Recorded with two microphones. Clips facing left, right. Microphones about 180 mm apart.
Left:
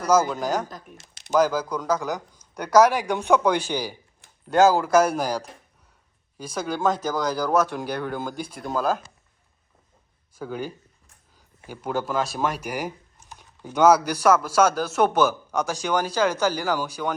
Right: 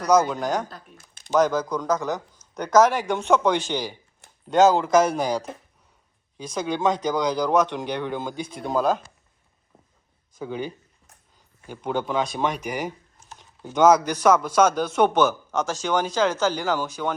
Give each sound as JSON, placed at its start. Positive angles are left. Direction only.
{"t": 0.0, "sound": "speech", "side_deg": 5}
{"t": 0.9, "sound": "a sound", "side_deg": 85}
{"t": 1.3, "sound": "speech", "side_deg": 5}
{"t": 10.3, "sound": "speech", "side_deg": 5}